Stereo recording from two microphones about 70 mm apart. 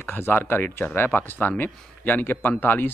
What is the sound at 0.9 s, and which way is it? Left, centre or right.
Speech, left.